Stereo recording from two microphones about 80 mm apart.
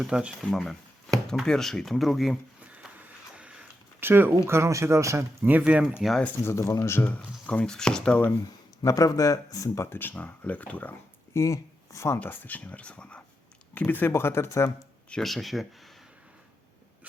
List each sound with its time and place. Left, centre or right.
0.0 s speech: centre
0.4 s speech: centre
2.6 s a sound: centre
4.0 s speech: right
5.4 s speech: right
6.0 s speech: centre
6.4 s speech: left
7.4 s speech: centre
8.8 s speech: left; by 10.9 s centre
11.3 s speech: left
12.2 s speech: left
15.1 s speech: centre